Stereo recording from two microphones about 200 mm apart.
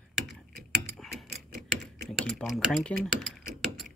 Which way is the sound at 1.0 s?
Centre (ahead or behind).